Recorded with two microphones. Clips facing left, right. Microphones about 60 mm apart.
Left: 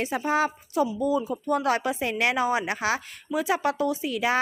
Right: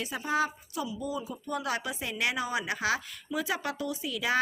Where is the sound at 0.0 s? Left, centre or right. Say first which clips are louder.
Left 5 dB; left.